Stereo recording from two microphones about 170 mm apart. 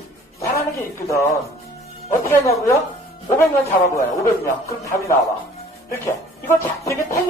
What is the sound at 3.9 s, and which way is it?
Speech, 15° left (ahead or behind).